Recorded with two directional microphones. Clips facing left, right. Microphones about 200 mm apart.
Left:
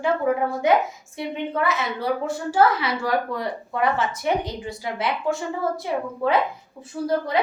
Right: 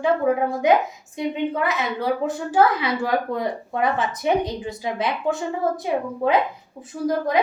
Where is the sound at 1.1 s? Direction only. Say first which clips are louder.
Right 3 dB; 15° right (ahead or behind).